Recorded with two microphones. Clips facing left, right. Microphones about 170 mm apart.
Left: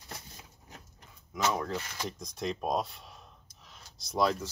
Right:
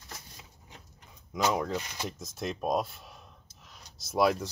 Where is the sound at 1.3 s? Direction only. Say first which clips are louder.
Right 2 dB; 15° right (ahead or behind).